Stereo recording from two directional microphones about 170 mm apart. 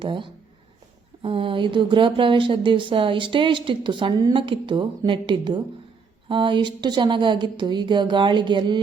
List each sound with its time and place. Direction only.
0.0 s speech: 30° right (ahead or behind)